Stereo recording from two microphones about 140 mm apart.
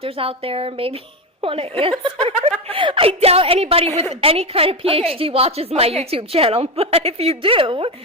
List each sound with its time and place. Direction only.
0.0 s a woman's voice: 40° right (ahead or behind)